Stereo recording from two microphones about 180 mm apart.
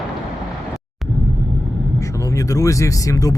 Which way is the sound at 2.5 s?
20° left (ahead or behind).